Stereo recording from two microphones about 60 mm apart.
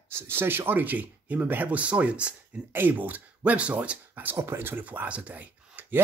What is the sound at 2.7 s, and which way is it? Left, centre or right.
Speech, right.